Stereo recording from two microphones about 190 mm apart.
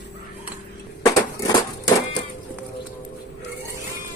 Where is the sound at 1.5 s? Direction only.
20° left (ahead or behind).